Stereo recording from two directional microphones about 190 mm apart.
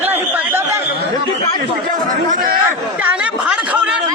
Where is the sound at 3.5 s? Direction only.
5° right (ahead or behind).